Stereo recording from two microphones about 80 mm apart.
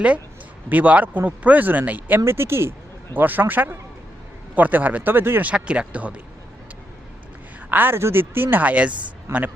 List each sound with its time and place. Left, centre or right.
0.7 s speech: right
7.7 s speech: right
9.3 s a man's voice: right